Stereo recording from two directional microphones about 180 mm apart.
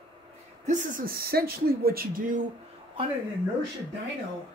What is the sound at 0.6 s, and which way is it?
Speech, 50° right (ahead or behind).